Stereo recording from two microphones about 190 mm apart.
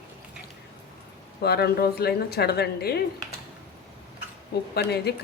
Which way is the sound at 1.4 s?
60° left (ahead or behind).